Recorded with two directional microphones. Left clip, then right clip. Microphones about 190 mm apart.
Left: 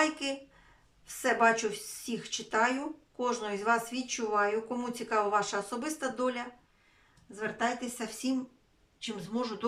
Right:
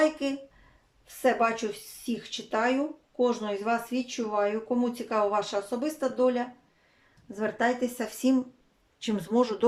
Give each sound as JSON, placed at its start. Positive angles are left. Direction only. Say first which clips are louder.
{"t": 0.0, "sound": "speech", "louder": "right 4 dB", "side_deg": -20}